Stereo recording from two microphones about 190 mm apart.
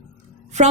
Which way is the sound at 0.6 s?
35° right (ahead or behind).